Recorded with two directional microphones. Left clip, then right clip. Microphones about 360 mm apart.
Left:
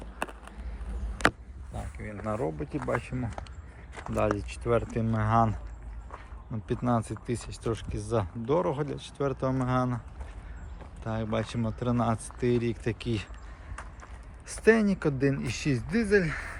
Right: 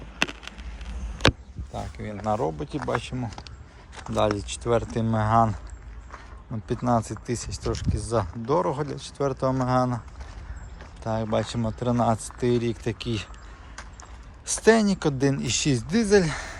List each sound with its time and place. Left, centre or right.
0.2 s a sound: centre
2.0 s speech: centre
6.7 s speech: centre
11.0 s speech: centre